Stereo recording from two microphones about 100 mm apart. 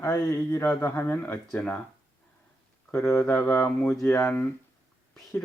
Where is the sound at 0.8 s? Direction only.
20° left (ahead or behind).